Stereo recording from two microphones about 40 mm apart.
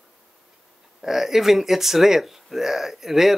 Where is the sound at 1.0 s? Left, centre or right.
Centre.